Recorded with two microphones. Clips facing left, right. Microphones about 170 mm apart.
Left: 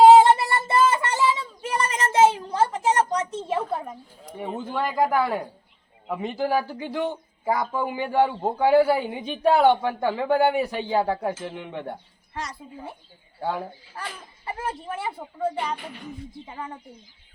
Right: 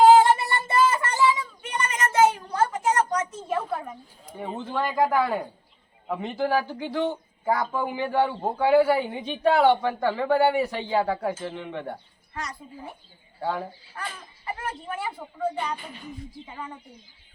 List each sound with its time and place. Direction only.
0.1 s child singing: 30° left (ahead or behind)
3.1 s a sound: 25° left (ahead or behind)
4.4 s a man's voice: 15° left (ahead or behind)
11.2 s speech: centre (ahead or behind)
11.5 s speech: 15° left (ahead or behind)
13.4 s a man's voice: 5° left (ahead or behind)
14.4 s speech: 25° left (ahead or behind)